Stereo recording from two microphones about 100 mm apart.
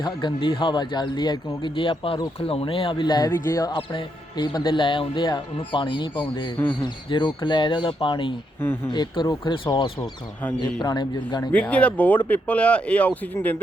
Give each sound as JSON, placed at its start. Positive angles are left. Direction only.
{"t": 0.0, "sound": "speech", "side_deg": 50}
{"t": 11.5, "sound": "speech", "side_deg": 15}